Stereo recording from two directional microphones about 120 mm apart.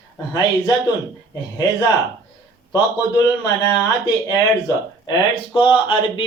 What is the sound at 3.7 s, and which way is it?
Speech, 35° left (ahead or behind).